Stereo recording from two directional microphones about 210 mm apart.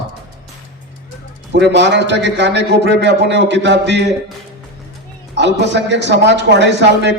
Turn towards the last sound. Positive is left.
turn(degrees=-55)  # may be behind; listen again after turning